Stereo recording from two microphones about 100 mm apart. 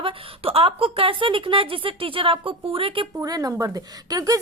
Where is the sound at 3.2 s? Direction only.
35° right (ahead or behind).